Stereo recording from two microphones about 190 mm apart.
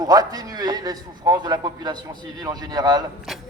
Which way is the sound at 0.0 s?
20° right (ahead or behind).